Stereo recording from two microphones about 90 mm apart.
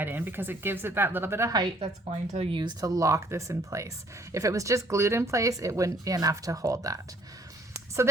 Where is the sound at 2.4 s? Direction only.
70° right (ahead or behind).